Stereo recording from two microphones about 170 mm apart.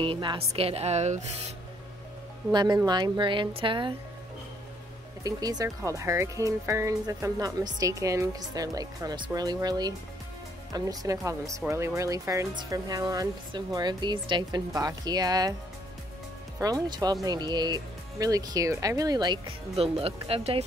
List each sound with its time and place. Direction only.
0.0 s speech: 30° right (ahead or behind)
2.5 s speech: 25° right (ahead or behind)
5.2 s speech: 20° right (ahead or behind)
16.5 s speech: 20° right (ahead or behind)